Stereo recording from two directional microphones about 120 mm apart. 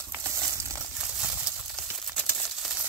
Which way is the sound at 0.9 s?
5° right (ahead or behind).